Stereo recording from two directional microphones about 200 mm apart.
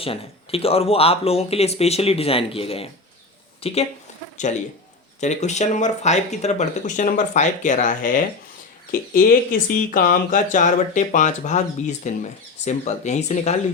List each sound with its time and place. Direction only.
0.0 s a woman's voice: 30° left (ahead or behind)
5.2 s speech: 35° left (ahead or behind)